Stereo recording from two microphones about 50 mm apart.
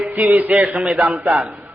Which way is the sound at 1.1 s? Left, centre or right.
Right.